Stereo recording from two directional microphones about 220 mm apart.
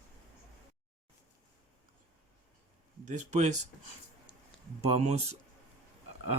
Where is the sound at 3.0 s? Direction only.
35° right (ahead or behind).